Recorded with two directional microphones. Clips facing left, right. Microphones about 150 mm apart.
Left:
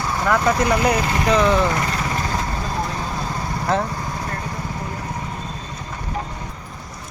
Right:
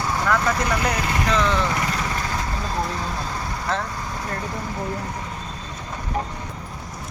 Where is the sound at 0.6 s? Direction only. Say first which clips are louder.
Left 5 dB; 15° left (ahead or behind).